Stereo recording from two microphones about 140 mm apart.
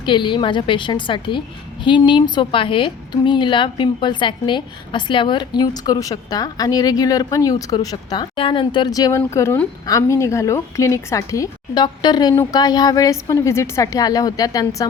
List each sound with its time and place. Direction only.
0.0 s a woman's voice: 35° left (ahead or behind)